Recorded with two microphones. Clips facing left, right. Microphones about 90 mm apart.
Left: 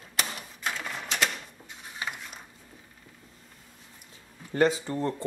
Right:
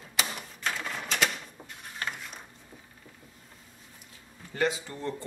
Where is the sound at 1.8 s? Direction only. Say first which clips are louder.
Even; 5° left (ahead or behind).